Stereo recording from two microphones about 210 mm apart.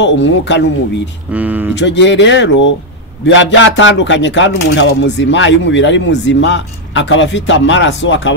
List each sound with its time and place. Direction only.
0.0 s speech: 55° left (ahead or behind)
1.3 s speech: 10° right (ahead or behind)
1.8 s speech: 60° left (ahead or behind)